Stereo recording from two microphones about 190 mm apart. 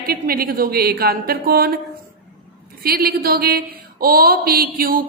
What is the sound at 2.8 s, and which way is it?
Speech, 55° right (ahead or behind).